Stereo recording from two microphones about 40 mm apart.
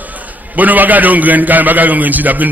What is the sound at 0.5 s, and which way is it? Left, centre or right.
A man's voice, right.